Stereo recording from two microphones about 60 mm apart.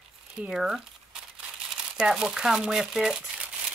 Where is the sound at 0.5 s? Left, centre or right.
Centre.